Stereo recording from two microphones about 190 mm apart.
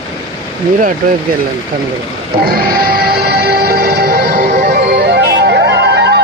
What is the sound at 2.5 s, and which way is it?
Music, 50° right (ahead or behind).